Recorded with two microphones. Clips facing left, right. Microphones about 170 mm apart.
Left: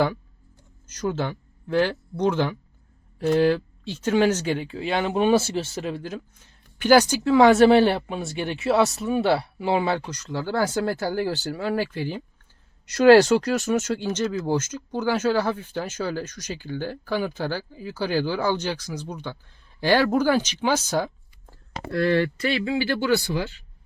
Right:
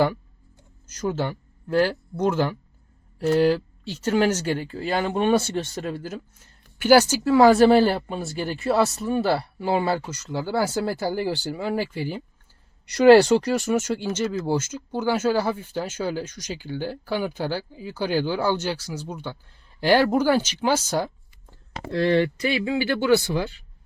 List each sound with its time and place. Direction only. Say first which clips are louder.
0.9 s speech: even; 10° right (ahead or behind)
21.8 s speech: right 1 dB; 25° right (ahead or behind)